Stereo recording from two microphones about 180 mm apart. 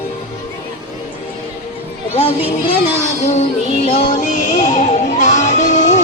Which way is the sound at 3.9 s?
45° left (ahead or behind).